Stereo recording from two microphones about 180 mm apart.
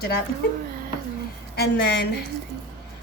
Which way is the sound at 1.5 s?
65° left (ahead or behind).